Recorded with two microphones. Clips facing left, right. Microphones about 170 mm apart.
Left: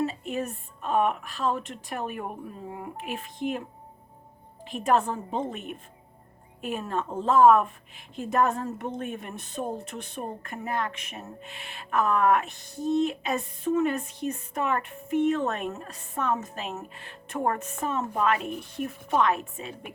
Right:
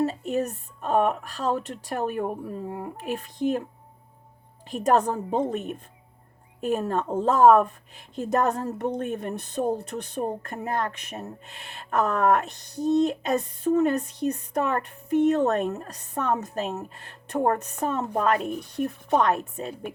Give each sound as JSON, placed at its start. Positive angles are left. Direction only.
{"t": 0.0, "sound": "speech", "side_deg": -40}
{"t": 4.7, "sound": "speech", "side_deg": -40}